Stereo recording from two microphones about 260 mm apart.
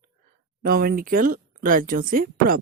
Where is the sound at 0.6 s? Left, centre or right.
Right.